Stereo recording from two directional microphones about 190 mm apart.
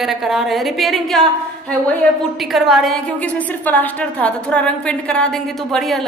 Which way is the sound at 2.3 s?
Centre (ahead or behind).